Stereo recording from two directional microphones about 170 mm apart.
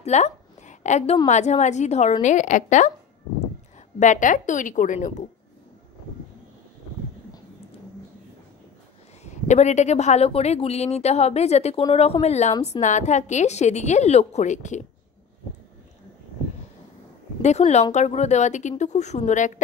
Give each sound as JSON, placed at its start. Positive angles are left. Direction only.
{"t": 0.0, "sound": "a sound", "side_deg": 40}
{"t": 1.2, "sound": "a woman's voice", "side_deg": 40}
{"t": 4.0, "sound": "a woman's voice", "side_deg": 50}
{"t": 9.2, "sound": "a woman's voice", "side_deg": 40}
{"t": 17.4, "sound": "a woman's voice", "side_deg": 40}